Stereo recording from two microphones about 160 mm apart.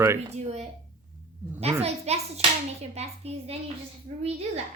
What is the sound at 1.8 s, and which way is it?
Speech, 40° right (ahead or behind).